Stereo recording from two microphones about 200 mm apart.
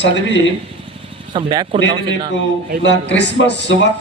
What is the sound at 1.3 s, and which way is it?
Speech, 25° right (ahead or behind).